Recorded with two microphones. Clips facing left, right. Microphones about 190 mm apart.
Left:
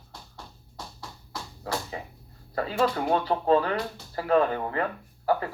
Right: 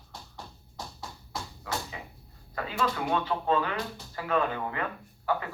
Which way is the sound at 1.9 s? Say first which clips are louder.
Left 6 dB; 35° left (ahead or behind).